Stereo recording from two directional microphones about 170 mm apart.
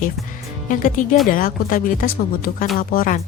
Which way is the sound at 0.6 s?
50° left (ahead or behind).